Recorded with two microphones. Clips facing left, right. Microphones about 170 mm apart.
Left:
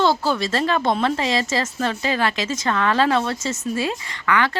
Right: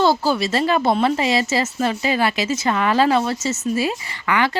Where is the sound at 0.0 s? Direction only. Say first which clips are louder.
Right 2 dB; 5° right (ahead or behind).